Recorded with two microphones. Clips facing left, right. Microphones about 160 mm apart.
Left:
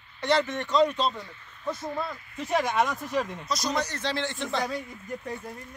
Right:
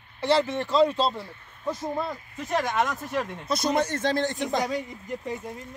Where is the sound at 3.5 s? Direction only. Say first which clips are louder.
Right 7 dB; 55° right (ahead or behind).